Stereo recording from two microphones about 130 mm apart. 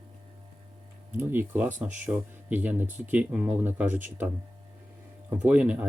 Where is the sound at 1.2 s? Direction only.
15° right (ahead or behind).